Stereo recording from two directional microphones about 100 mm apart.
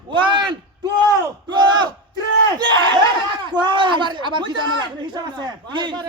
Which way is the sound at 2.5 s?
45° right (ahead or behind).